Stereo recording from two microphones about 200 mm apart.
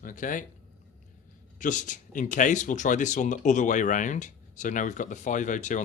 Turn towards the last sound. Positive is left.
turn(degrees=40)  # may be behind; listen again after turning